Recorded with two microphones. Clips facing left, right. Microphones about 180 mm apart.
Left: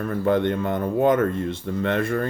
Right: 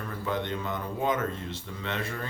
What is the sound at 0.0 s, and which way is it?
Speech, 55° left (ahead or behind).